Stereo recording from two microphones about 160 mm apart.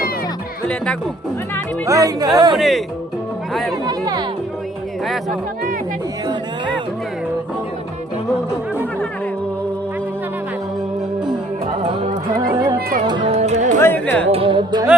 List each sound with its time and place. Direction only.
1.9 s speech: 20° right (ahead or behind)
2.6 s speech: centre (ahead or behind)
3.8 s speech: 25° right (ahead or behind)
5.0 s speech: centre (ahead or behind)
13.1 s speech: 35° right (ahead or behind)
13.8 s speech: 10° left (ahead or behind)
14.3 s speech: 35° right (ahead or behind)